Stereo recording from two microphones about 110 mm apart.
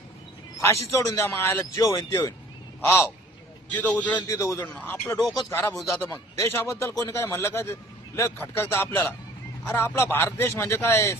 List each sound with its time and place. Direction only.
0.9 s a man's voice: 30° left (ahead or behind)
3.7 s a man's voice: 15° left (ahead or behind)
4.2 s a man's voice: 30° left (ahead or behind)